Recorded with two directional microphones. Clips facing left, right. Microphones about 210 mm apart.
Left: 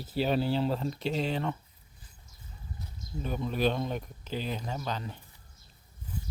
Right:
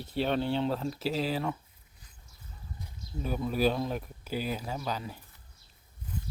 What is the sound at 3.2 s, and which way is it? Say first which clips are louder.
Speech: right 1 dB; 5° right (ahead or behind).